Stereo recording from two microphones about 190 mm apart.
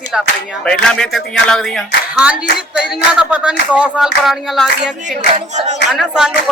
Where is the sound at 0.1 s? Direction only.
Centre (ahead or behind).